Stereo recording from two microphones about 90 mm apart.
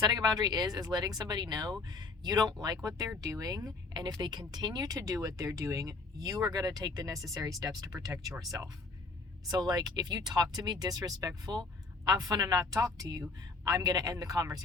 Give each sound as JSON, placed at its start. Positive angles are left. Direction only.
{"t": 0.0, "sound": "speech", "side_deg": -50}